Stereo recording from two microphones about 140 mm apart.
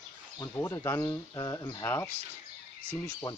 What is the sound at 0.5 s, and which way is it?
Speech, 15° left (ahead or behind).